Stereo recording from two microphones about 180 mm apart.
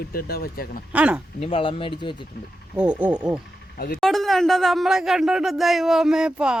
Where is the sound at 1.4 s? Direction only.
30° left (ahead or behind).